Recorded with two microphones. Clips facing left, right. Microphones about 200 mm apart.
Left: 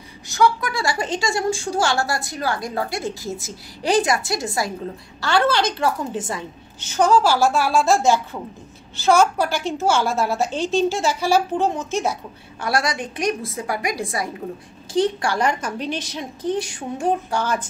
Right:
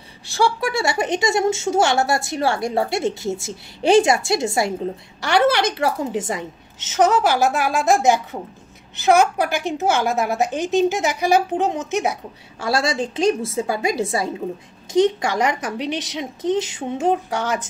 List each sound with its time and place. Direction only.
0.3 s a woman's voice: 30° right (ahead or behind)
9.5 s a woman's voice: 55° right (ahead or behind)
9.8 s a woman's voice: 15° right (ahead or behind)
11.9 s a woman's voice: 65° right (ahead or behind)
12.5 s a woman's voice: 25° right (ahead or behind)